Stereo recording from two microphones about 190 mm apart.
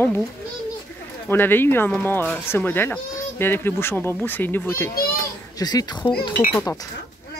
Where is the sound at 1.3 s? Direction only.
10° left (ahead or behind).